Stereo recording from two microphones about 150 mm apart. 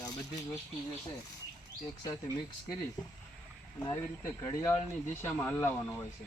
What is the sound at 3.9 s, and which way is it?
Speech, 15° left (ahead or behind).